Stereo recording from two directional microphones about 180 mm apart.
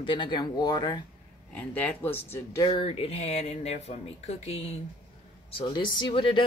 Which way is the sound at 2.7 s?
30° left (ahead or behind).